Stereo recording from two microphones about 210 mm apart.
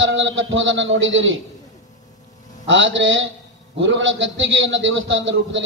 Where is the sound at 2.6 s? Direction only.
65° right (ahead or behind).